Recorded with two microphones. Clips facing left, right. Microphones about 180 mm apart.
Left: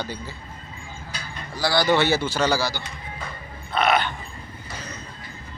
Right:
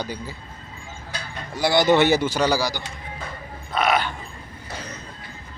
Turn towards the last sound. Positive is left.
turn(degrees=-10)  # may be behind; listen again after turning